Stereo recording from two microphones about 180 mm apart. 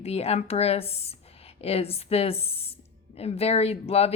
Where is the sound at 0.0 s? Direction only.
35° left (ahead or behind).